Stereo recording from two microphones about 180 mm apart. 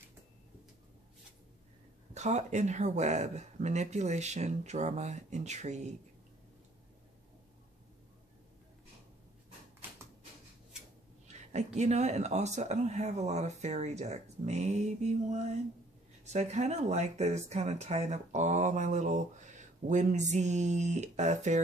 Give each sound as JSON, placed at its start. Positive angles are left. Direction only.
{"t": 2.1, "sound": "speech", "side_deg": -40}
{"t": 11.2, "sound": "speech", "side_deg": -40}